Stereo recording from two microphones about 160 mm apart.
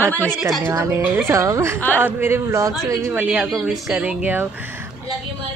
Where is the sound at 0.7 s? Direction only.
20° right (ahead or behind).